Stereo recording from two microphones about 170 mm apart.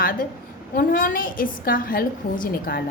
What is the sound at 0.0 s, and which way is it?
A woman's voice, 55° left (ahead or behind).